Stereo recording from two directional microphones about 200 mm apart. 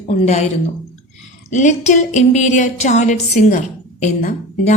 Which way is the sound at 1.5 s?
35° left (ahead or behind).